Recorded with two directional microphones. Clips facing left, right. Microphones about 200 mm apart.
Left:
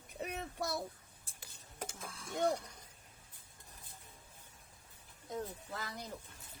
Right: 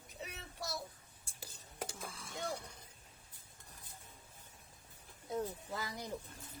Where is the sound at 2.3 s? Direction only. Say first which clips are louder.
Left 9 dB; 60° left (ahead or behind).